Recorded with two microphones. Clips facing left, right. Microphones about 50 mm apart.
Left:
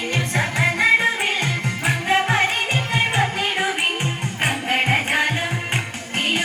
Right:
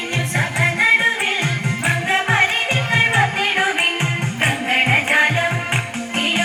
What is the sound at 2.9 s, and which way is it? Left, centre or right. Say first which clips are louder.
Music: right 5 dB; right.